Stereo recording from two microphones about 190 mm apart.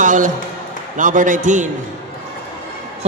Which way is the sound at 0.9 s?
40° right (ahead or behind).